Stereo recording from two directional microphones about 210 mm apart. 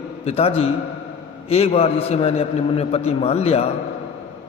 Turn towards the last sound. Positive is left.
turn(degrees=30)  # may be behind; listen again after turning